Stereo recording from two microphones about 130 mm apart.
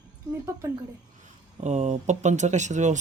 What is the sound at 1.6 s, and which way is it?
Speech, 60° right (ahead or behind).